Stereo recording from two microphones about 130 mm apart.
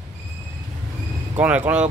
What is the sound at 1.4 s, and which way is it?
Speech, 10° right (ahead or behind).